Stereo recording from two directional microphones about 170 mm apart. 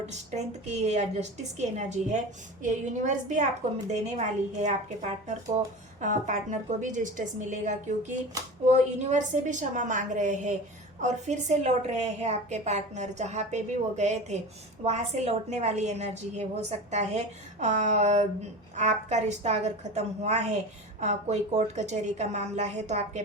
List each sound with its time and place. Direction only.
0.0 s a woman's voice: 40° right (ahead or behind)